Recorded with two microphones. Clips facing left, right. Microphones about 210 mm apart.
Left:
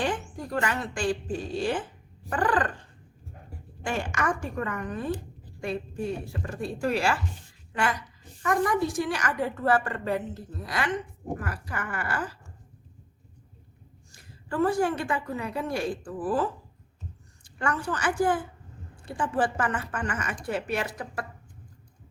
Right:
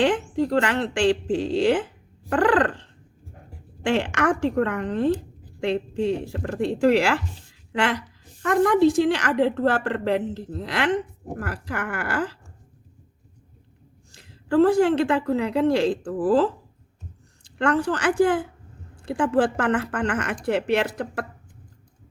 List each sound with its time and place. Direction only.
0.0 s speech: 80° right
2.3 s speech: 80° right
3.8 s a woman's voice: 75° right (ahead or behind)
8.4 s a woman's voice: 65° right (ahead or behind)
14.5 s a woman's voice: 80° right; by 21.2 s 65° right (ahead or behind)